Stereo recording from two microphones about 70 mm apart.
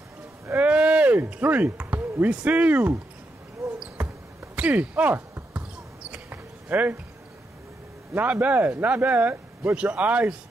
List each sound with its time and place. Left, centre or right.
0.6 s speech: centre
4.6 s basketball bounce: centre
8.3 s speech: right